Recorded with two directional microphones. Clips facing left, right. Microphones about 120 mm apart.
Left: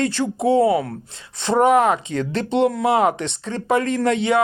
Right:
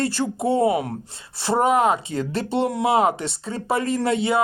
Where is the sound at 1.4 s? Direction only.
5° right (ahead or behind).